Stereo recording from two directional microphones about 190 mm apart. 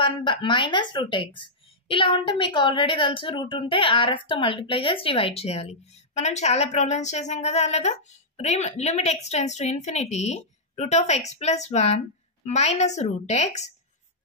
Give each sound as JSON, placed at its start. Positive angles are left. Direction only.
{"t": 0.0, "sound": "speech", "side_deg": 25}